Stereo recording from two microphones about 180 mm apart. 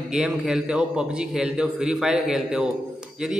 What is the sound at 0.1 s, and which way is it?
A man's voice, 5° right (ahead or behind).